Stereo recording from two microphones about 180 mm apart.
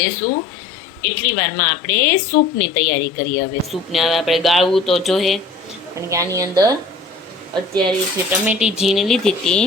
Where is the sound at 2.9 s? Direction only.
50° left (ahead or behind).